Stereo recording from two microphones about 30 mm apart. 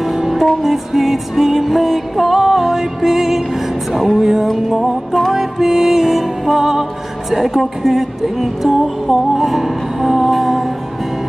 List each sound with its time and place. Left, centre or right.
0.0 s music: centre
3.9 s music: centre
4.2 s music: centre